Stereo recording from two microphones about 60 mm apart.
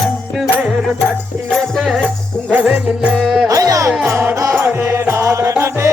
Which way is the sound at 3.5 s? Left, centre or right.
Right.